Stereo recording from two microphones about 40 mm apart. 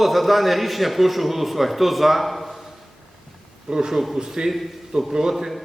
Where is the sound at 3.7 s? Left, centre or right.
Right.